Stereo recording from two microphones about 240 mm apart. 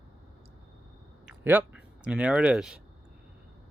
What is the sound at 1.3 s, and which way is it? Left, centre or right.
Speech, centre.